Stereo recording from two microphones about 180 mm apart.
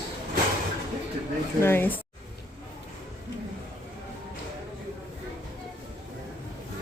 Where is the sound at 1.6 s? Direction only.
10° left (ahead or behind).